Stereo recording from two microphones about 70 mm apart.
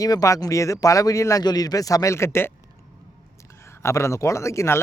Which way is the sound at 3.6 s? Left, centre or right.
Left.